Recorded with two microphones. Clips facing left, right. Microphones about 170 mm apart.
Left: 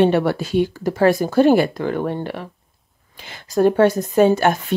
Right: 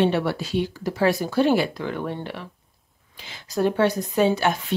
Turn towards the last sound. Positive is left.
turn(degrees=50)  # may be behind; listen again after turning